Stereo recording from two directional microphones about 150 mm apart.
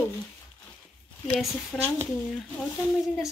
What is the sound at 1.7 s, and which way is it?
Speech, 5° left (ahead or behind).